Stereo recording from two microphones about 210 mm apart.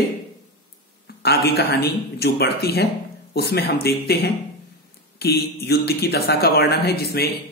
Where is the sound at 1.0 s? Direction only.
50° left (ahead or behind).